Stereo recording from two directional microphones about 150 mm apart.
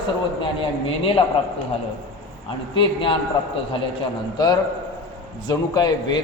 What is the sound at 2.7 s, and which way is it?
Speech, 35° left (ahead or behind).